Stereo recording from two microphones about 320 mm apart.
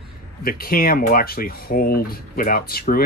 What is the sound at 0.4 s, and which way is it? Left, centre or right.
Speech, left.